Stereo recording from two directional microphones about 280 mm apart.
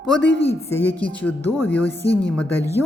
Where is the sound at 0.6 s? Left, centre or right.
Centre.